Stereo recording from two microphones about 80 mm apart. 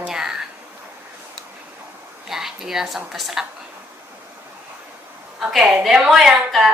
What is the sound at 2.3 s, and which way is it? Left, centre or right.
A woman's voice, centre.